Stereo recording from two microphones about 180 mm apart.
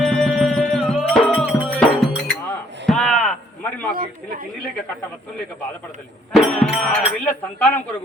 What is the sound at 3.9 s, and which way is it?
Speech, 50° right (ahead or behind).